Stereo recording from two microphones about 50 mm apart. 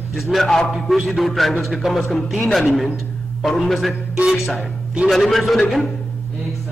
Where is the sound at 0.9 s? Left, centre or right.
Centre.